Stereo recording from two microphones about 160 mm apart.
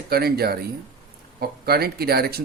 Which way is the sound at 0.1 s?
75° right (ahead or behind).